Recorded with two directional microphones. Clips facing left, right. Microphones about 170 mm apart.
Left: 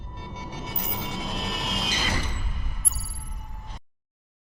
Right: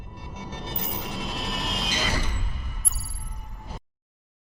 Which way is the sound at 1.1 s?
Centre (ahead or behind).